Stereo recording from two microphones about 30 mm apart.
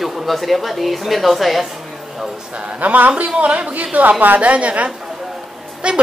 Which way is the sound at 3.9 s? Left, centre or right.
Right.